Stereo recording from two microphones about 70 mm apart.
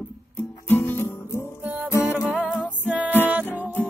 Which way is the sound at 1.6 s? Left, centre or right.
Right.